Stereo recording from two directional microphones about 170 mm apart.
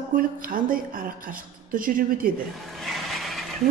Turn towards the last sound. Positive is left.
turn(degrees=0)  # may be behind; listen again after turning